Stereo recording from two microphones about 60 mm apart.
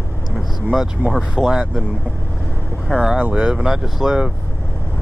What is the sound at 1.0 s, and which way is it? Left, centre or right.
Speech, right.